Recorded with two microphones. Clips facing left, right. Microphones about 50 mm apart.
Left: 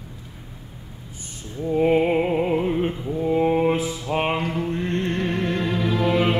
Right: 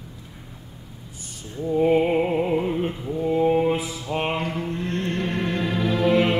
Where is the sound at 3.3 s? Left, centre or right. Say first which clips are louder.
Even; left.